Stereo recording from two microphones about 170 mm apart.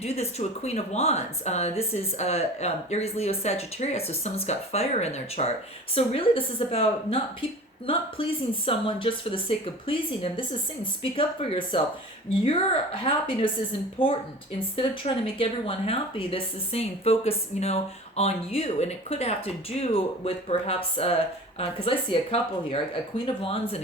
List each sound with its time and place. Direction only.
0.0 s speech: 40° left (ahead or behind)
13.1 s speech: 30° left (ahead or behind)